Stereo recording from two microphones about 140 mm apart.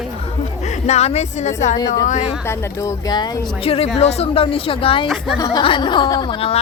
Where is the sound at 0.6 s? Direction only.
55° left (ahead or behind).